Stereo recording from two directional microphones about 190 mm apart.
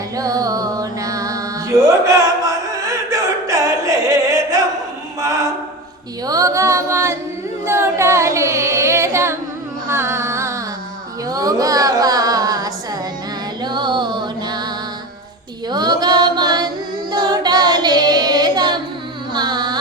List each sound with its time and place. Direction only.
0.2 s music: 20° right (ahead or behind)
6.2 s a sound: 20° right (ahead or behind)
7.6 s singing: 15° right (ahead or behind)
9.9 s carnatic music: 15° right (ahead or behind)
11.3 s female singing: 20° right (ahead or behind)
13.6 s music: 25° right (ahead or behind)
15.7 s singing: 20° right (ahead or behind)
19.3 s music: 25° right (ahead or behind)